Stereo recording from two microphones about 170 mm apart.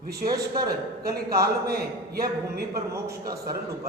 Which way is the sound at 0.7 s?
65° right (ahead or behind).